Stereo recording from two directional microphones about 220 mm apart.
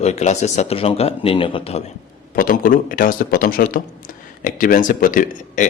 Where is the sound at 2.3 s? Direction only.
40° left (ahead or behind).